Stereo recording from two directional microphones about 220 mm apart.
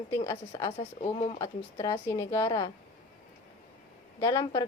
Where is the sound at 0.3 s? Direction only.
20° left (ahead or behind).